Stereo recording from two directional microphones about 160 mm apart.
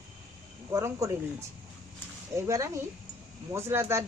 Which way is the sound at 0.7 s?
20° right (ahead or behind).